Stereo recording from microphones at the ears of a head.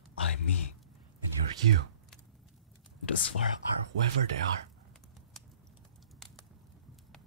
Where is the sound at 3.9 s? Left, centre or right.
Right.